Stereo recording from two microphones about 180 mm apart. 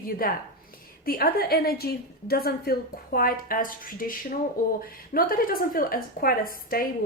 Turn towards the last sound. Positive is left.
turn(degrees=55)  # may be behind; listen again after turning